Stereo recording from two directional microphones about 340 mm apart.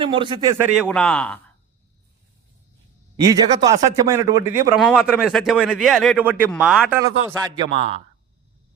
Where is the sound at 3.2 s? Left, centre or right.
Centre.